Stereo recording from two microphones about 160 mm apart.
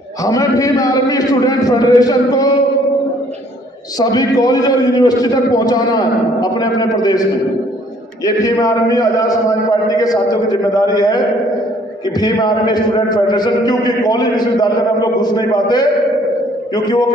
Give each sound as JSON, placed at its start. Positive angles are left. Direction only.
{"t": 0.2, "sound": "a man's voice", "side_deg": 20}
{"t": 4.0, "sound": "a man's voice", "side_deg": 25}
{"t": 8.3, "sound": "a man's voice", "side_deg": 20}